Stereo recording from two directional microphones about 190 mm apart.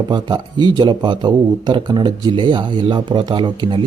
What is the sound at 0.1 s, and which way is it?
A man's voice, 25° right (ahead or behind).